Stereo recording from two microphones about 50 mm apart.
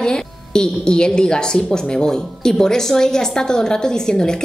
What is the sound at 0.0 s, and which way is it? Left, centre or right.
A woman's voice, centre.